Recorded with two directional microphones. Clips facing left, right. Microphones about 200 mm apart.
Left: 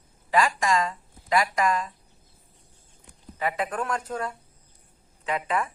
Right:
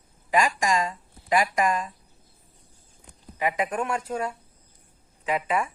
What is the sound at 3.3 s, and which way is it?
Speech, 15° right (ahead or behind).